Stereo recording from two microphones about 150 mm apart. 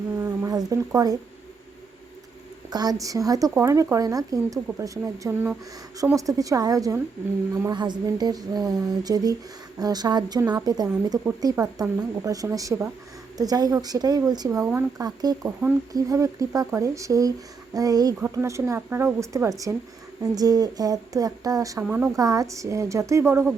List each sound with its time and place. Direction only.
0.2 s speech: 20° right (ahead or behind)
2.6 s a woman's voice: 25° right (ahead or behind)
21.8 s speech: 10° right (ahead or behind)
22.1 s a woman's voice: 25° right (ahead or behind)